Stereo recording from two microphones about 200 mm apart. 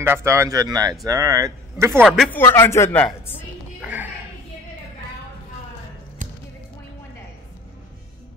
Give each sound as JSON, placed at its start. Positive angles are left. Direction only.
{"t": 0.0, "sound": "speech", "side_deg": -10}
{"t": 2.0, "sound": "speech", "side_deg": 0}
{"t": 3.8, "sound": "a sound", "side_deg": -5}